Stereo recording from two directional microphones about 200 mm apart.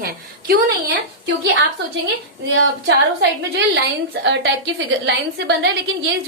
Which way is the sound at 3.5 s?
60° right (ahead or behind).